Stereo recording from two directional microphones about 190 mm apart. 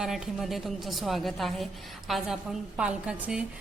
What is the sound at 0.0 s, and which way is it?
A woman's voice, centre (ahead or behind).